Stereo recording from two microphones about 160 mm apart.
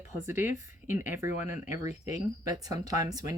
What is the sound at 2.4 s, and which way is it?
Speech, 20° right (ahead or behind).